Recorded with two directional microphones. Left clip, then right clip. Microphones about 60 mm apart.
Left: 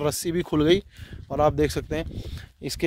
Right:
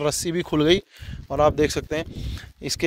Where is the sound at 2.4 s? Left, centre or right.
Left.